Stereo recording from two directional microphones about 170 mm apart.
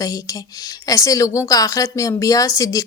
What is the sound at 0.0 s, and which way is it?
Speech, 20° left (ahead or behind).